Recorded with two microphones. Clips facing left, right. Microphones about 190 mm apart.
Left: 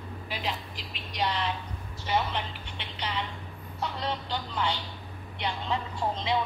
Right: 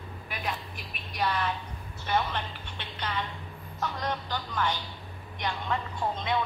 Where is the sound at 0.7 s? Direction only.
90° left.